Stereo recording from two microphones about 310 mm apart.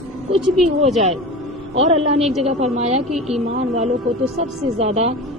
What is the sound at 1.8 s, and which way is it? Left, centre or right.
A man's voice, centre.